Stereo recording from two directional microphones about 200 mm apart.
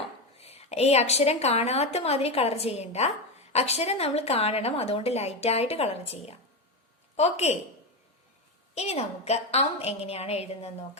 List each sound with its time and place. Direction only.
0.3 s a woman's voice: 30° left (ahead or behind)
8.7 s a woman's voice: 30° left (ahead or behind)